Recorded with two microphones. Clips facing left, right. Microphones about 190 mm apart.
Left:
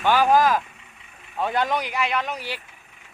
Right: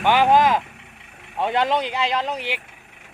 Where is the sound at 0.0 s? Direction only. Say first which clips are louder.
Right 2 dB; 20° right (ahead or behind).